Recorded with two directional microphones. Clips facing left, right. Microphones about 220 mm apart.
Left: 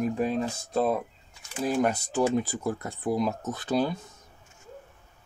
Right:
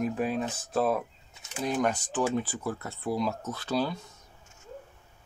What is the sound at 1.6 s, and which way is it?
Speech, 5° left (ahead or behind).